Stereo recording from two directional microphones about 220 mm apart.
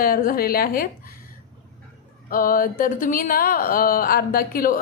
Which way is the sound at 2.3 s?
40° left (ahead or behind).